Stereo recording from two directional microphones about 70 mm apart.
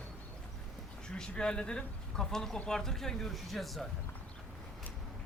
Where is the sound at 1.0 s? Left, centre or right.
Centre.